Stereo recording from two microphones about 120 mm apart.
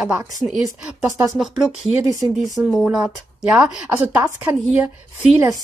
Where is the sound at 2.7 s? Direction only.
5° right (ahead or behind).